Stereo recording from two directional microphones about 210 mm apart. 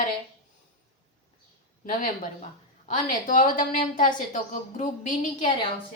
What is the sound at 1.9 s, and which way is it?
A woman's voice, 40° left (ahead or behind).